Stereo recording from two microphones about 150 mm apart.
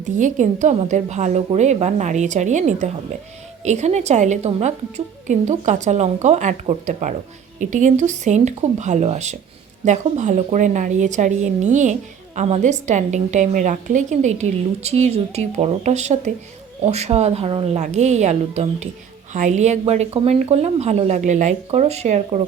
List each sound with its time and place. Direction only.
0.0 s a woman's voice: 55° right (ahead or behind); by 17.7 s 40° right (ahead or behind)
17.7 s a woman's voice: 50° right (ahead or behind)